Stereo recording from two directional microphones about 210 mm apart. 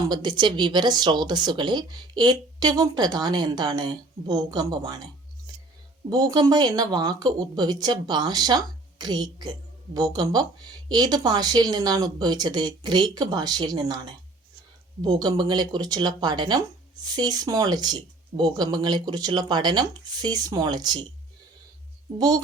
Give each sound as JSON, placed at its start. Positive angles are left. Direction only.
{"t": 0.0, "sound": "speech", "side_deg": -20}
{"t": 6.1, "sound": "speech", "side_deg": -20}